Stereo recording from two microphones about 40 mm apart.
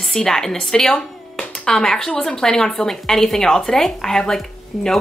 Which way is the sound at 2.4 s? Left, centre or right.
Centre.